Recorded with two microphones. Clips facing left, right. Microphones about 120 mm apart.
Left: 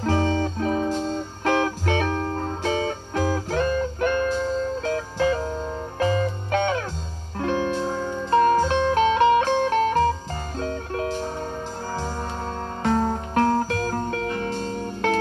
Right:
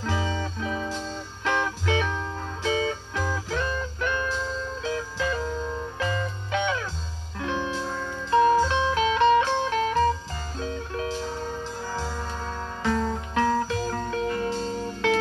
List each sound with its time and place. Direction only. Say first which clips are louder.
0.0 s music: left 7 dB; 50° left (ahead or behind)
7.8 s music: left 5 dB; 25° left (ahead or behind)
8.3 s music: left 1 dB; 50° left (ahead or behind)
13.3 s music: left 2 dB; 45° left (ahead or behind)